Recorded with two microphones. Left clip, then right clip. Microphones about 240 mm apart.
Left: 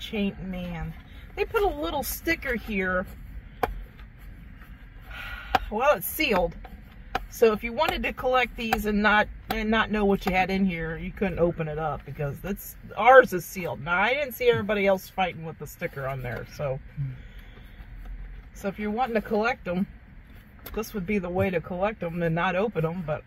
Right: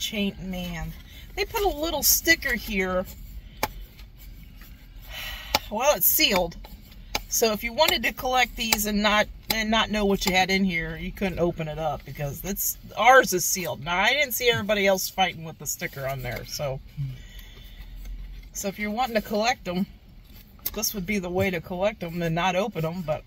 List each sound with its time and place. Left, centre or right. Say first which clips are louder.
0.0 s speech: right 2 dB; right
5.1 s speech: left 1 dB; right
18.6 s speech: right 1 dB; right